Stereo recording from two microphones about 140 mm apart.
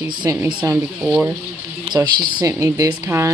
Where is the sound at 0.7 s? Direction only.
10° right (ahead or behind).